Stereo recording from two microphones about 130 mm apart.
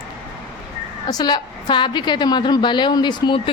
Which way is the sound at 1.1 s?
35° left (ahead or behind).